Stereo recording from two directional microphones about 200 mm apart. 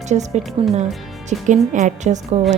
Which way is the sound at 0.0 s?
35° right (ahead or behind).